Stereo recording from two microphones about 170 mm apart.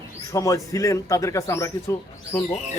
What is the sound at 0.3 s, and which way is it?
Speech, 20° left (ahead or behind).